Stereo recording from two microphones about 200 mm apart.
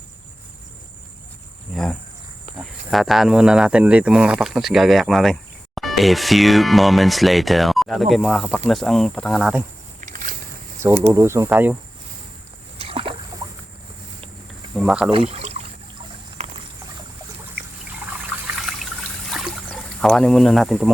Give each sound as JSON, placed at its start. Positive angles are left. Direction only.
{"t": 1.7, "sound": "speech", "side_deg": 0}
{"t": 10.0, "sound": "a sound", "side_deg": -40}
{"t": 11.1, "sound": "speech", "side_deg": -15}
{"t": 12.8, "sound": "rowboat", "side_deg": -30}
{"t": 14.8, "sound": "speech", "side_deg": 0}
{"t": 15.1, "sound": "speech", "side_deg": -30}
{"t": 16.4, "sound": "a sound", "side_deg": -35}
{"t": 18.4, "sound": "trickle", "side_deg": 0}
{"t": 19.3, "sound": "a sound", "side_deg": 0}